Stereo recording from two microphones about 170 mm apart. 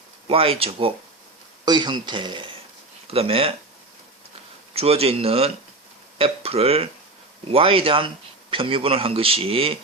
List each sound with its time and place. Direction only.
0.3 s a man's voice: 35° right (ahead or behind)
4.7 s a man's voice: 35° right (ahead or behind)